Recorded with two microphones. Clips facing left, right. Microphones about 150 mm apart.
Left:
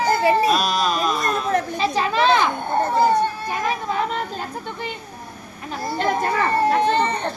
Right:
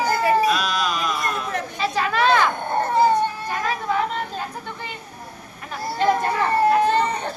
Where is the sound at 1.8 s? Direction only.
25° left (ahead or behind).